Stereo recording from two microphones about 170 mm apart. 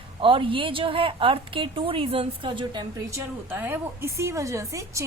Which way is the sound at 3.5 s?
10° right (ahead or behind).